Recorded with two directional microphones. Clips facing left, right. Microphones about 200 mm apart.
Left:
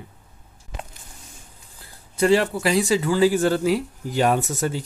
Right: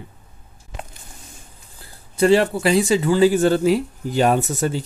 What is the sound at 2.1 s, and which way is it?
Speech, 30° right (ahead or behind).